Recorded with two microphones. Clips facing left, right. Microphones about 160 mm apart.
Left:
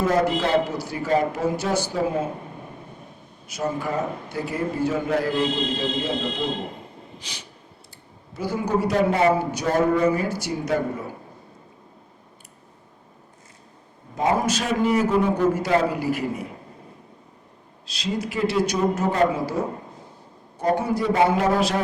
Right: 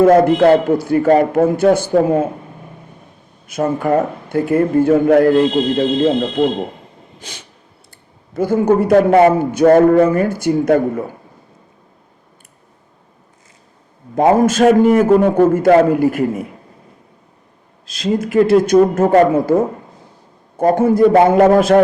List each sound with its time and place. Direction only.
0.0 s a man's voice: 55° right (ahead or behind)
3.4 s a man's voice: 55° right (ahead or behind)
14.2 s a man's voice: 50° right (ahead or behind)
17.8 s a man's voice: 50° right (ahead or behind)